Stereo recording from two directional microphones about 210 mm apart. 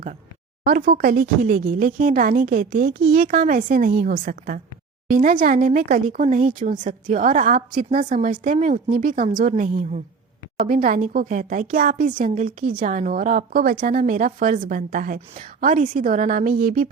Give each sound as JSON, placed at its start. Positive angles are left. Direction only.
{"t": 0.6, "sound": "a woman's voice", "side_deg": -45}